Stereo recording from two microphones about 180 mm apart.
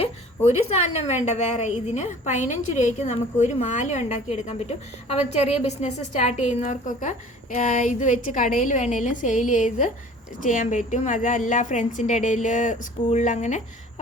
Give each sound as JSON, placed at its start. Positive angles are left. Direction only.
{"t": 0.6, "sound": "a woman's voice", "side_deg": 35}